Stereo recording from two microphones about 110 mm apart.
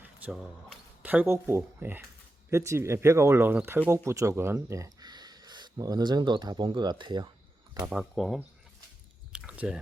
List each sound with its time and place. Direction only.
1.0 s speech: 15° right (ahead or behind); by 7.3 s 40° right (ahead or behind)
7.9 s speech: centre (ahead or behind)
9.3 s chewing: 10° right (ahead or behind)